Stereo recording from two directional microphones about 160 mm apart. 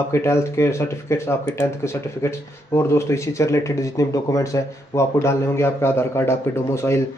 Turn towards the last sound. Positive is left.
turn(degrees=15)  # may be behind; listen again after turning